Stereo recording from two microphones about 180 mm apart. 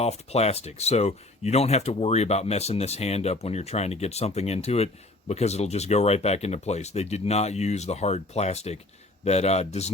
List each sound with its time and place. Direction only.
0.0 s speech: 35° left (ahead or behind)